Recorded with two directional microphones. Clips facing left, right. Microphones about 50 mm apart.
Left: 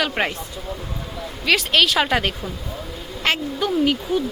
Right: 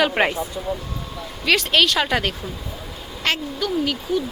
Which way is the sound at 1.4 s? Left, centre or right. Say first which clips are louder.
Even; centre.